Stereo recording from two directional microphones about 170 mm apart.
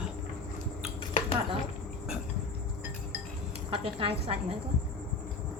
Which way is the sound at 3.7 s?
35° right (ahead or behind).